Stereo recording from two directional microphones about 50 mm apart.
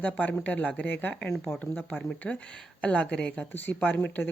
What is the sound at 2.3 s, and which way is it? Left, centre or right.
A woman's voice, left.